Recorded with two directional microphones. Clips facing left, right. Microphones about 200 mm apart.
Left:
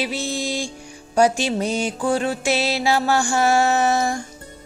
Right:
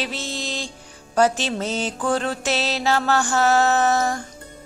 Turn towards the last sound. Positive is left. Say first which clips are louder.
# even
turn(degrees=10)  # may be behind; listen again after turning